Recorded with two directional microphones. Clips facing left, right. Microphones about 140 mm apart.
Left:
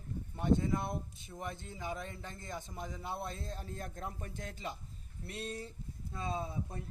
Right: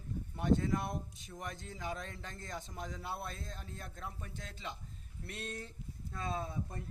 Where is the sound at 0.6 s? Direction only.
15° left (ahead or behind); by 4.7 s 45° left (ahead or behind).